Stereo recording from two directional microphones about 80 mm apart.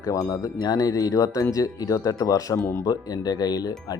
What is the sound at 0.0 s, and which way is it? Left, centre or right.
Speech, left.